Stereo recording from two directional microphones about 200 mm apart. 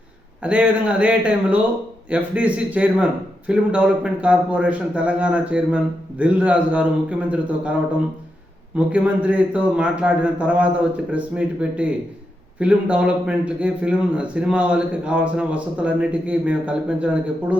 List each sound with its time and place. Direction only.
0.4 s a man's voice: 5° right (ahead or behind)
8.9 s a man's voice: 5° right (ahead or behind)